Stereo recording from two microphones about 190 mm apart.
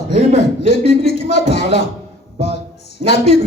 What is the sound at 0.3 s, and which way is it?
A man's voice, 60° left (ahead or behind).